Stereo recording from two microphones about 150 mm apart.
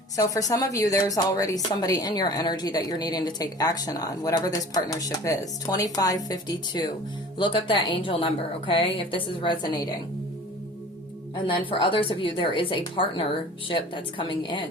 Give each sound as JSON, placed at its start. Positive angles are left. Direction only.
{"t": 0.2, "sound": "a woman's voice", "side_deg": 20}
{"t": 11.7, "sound": "a woman's voice", "side_deg": 35}